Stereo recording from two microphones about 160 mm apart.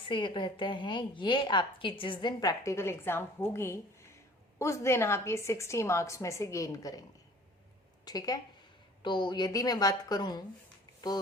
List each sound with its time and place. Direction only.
0.0 s a woman's voice: 30° left (ahead or behind)
8.0 s a woman's voice: 25° left (ahead or behind)